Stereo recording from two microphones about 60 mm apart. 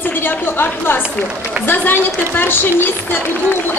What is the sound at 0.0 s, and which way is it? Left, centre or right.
A woman's voice, left.